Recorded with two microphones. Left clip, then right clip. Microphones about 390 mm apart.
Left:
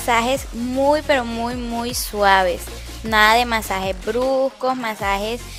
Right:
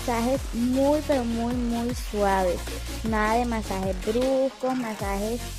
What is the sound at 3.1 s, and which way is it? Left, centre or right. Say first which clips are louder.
Music: left 10 dB; left.